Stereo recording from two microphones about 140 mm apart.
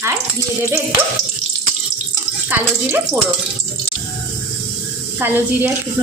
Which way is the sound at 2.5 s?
15° right (ahead or behind).